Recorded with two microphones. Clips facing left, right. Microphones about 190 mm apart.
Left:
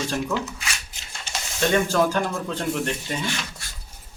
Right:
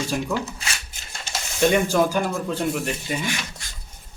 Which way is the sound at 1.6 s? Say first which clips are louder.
Right 2 dB; 15° right (ahead or behind).